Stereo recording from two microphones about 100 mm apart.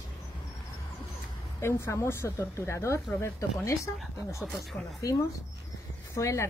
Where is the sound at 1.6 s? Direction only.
25° left (ahead or behind).